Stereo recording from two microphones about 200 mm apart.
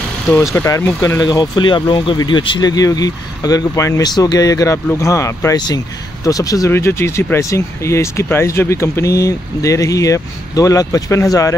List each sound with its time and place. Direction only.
0.6 s speech: 10° left (ahead or behind)